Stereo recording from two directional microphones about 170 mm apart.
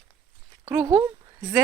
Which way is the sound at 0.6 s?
20° right (ahead or behind).